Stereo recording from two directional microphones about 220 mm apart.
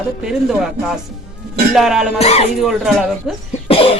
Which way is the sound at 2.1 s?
30° left (ahead or behind).